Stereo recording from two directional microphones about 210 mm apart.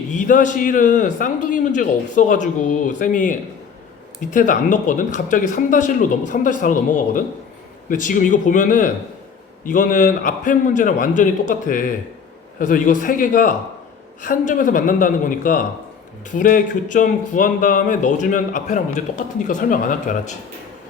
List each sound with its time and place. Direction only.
0.1 s a man's voice: 40° left (ahead or behind)